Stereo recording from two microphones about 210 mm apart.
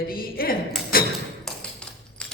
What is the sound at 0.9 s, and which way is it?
Thump, 45° left (ahead or behind).